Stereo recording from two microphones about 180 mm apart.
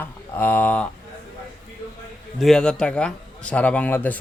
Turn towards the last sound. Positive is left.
turn(degrees=10)  # may be behind; listen again after turning